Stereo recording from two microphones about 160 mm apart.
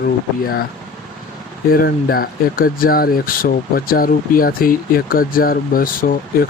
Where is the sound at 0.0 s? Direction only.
70° left (ahead or behind).